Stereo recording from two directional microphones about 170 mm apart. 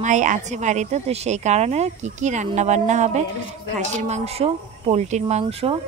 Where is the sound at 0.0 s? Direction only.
45° right (ahead or behind).